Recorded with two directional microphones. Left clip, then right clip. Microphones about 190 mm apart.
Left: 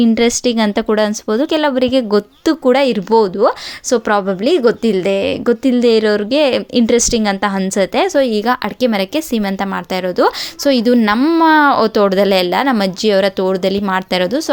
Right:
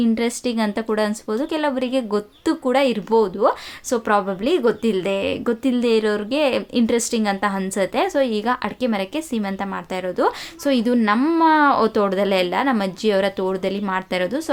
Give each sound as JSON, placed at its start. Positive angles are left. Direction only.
{"t": 0.0, "sound": "speech", "side_deg": 35}